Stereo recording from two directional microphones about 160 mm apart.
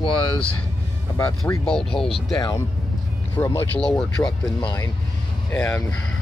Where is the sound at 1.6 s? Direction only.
5° left (ahead or behind).